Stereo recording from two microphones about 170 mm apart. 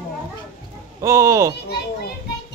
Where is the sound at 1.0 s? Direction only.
15° right (ahead or behind).